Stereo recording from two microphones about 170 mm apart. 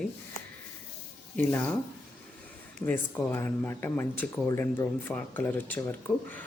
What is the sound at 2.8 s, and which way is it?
Speech, 15° left (ahead or behind).